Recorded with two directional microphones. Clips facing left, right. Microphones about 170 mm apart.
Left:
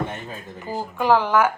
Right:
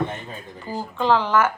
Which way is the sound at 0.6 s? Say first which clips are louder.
Even; 15° left (ahead or behind).